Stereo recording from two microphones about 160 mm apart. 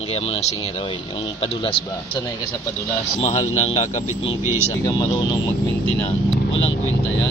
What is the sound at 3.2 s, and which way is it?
Speech, 45° left (ahead or behind).